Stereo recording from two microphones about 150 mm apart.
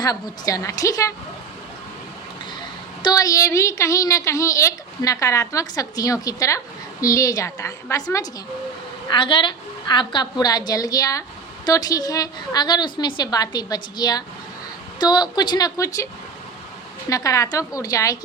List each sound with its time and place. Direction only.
0.0 s a woman's voice: 25° left (ahead or behind)
3.0 s a woman's voice: 25° left (ahead or behind)
17.1 s a woman's voice: 20° left (ahead or behind)